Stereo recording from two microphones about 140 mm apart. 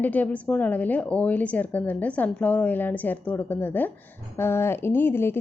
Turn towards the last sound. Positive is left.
turn(degrees=15)  # may be behind; listen again after turning